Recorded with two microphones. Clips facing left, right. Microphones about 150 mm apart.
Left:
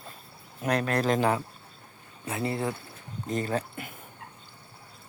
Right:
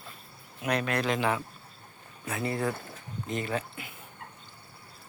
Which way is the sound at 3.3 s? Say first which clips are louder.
Left 3 dB; 40° left (ahead or behind).